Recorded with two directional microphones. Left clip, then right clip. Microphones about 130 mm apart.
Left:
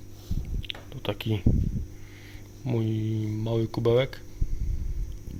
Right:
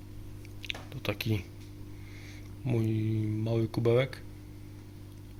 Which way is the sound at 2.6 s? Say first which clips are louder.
Left 2 dB; 25° left (ahead or behind).